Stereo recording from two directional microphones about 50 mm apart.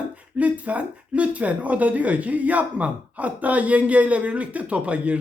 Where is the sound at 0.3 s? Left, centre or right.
Right.